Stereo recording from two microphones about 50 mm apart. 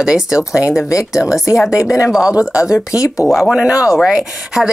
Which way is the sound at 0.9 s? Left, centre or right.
Left.